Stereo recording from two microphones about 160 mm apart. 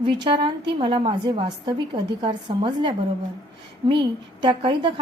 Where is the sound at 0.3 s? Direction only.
30° right (ahead or behind).